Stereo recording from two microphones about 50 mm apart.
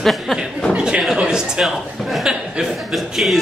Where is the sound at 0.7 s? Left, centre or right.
Right.